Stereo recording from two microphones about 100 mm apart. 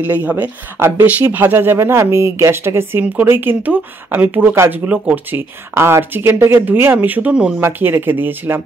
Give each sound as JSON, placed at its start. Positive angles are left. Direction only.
{"t": 0.0, "sound": "speech", "side_deg": -15}